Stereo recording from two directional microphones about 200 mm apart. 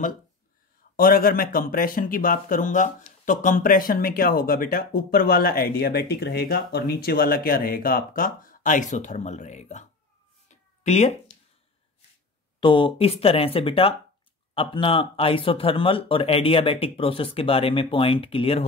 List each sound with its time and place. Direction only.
0.9 s speech: 45° left (ahead or behind)
10.5 s cat: 35° left (ahead or behind)
12.5 s speech: 25° left (ahead or behind)